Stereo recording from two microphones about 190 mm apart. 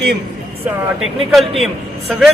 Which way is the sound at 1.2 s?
Centre (ahead or behind).